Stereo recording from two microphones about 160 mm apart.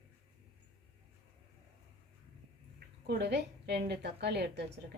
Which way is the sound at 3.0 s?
90° right.